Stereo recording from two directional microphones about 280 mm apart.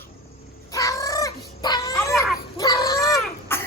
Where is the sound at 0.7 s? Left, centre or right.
Centre.